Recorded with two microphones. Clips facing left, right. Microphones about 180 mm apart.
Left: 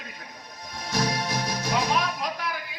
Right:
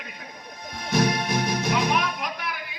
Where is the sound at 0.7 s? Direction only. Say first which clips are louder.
Right 4 dB; 60° right (ahead or behind).